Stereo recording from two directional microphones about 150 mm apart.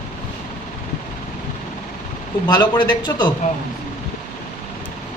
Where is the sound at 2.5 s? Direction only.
30° left (ahead or behind).